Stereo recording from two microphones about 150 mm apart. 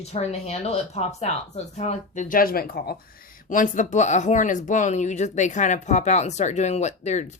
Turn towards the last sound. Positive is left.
turn(degrees=50)  # may be behind; listen again after turning